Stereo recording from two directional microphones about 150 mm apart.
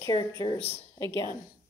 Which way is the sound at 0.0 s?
25° left (ahead or behind).